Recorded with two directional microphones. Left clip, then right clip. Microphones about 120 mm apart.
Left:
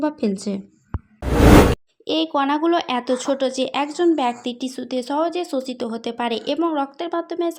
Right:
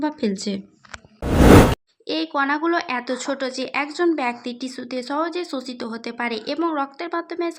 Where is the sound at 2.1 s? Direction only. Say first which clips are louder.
Left 2 dB; 55° left (ahead or behind).